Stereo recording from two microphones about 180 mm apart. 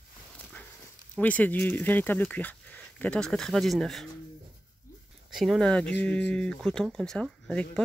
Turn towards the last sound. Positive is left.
turn(degrees=5)  # may be behind; listen again after turning